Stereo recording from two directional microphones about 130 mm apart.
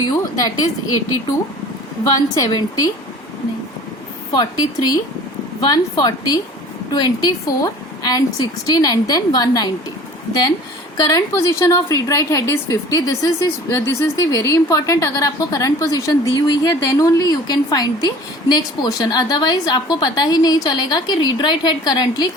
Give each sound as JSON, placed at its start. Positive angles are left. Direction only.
{"t": 0.0, "sound": "a woman's voice", "side_deg": 30}
{"t": 2.0, "sound": "a woman's voice", "side_deg": 25}
{"t": 4.3, "sound": "a woman's voice", "side_deg": 30}
{"t": 10.9, "sound": "a woman's voice", "side_deg": 25}